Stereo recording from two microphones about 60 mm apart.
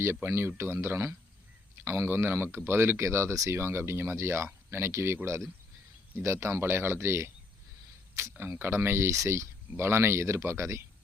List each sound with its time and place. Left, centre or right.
0.0 s speech: right
3.6 s speech: right
8.5 s speech: right